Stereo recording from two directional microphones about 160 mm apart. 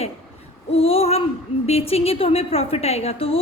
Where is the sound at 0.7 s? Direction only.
40° left (ahead or behind).